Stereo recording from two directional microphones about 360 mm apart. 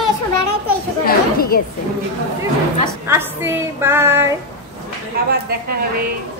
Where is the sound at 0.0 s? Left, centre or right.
Left.